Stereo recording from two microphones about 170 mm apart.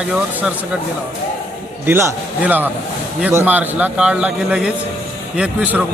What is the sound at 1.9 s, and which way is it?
A man's voice, 15° right (ahead or behind).